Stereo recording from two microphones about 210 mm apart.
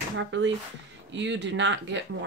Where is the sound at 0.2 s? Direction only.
60° right (ahead or behind).